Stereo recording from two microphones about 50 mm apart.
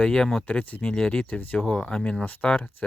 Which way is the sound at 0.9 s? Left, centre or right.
Centre.